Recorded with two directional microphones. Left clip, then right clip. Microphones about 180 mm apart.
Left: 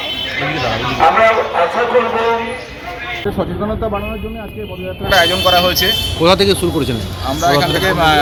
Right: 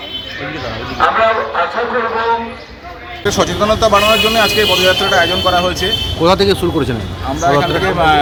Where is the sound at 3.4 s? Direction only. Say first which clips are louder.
Right 11 dB; 40° right (ahead or behind).